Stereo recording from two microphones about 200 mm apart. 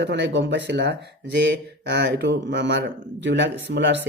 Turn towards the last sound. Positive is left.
turn(degrees=-60)  # may be behind; listen again after turning